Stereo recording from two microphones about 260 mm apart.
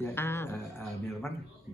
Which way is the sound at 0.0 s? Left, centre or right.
Centre.